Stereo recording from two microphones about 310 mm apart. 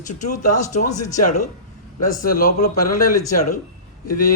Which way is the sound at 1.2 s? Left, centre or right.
Left.